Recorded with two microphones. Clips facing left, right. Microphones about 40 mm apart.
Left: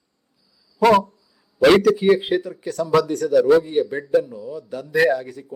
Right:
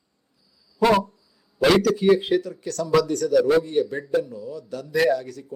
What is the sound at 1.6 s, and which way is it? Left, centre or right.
A man's voice, centre.